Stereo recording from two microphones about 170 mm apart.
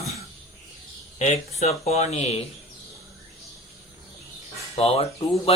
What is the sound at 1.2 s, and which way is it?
Speech, 40° left (ahead or behind).